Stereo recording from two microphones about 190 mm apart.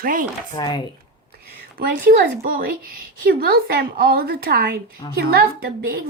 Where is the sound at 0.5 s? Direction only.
25° left (ahead or behind).